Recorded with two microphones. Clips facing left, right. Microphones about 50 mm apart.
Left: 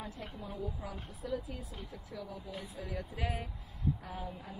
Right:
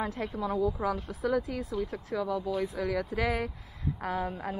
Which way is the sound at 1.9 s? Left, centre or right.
Right.